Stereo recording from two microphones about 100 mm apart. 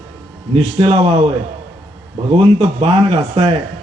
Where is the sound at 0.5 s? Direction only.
70° right (ahead or behind).